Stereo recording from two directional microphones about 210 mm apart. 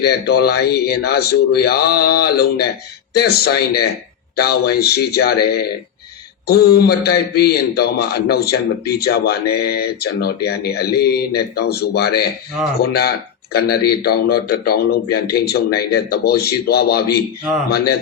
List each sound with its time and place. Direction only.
0.0 s a man's voice: 50° left (ahead or behind)